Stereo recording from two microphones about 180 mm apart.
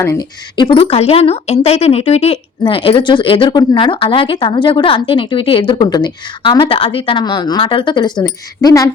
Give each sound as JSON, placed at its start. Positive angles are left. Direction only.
{"t": 0.0, "sound": "a woman's voice", "side_deg": 20}